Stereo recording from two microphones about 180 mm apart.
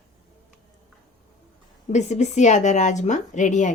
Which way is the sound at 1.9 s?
40° left (ahead or behind).